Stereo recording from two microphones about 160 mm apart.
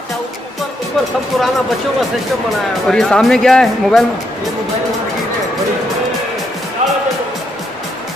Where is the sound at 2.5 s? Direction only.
Centre (ahead or behind).